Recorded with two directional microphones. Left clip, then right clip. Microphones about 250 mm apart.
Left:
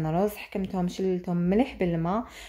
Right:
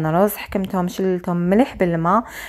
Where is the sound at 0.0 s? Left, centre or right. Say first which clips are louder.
Right 9 dB; right.